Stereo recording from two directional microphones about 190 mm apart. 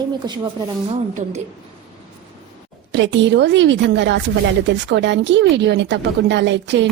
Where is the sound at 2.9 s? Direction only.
70° right (ahead or behind).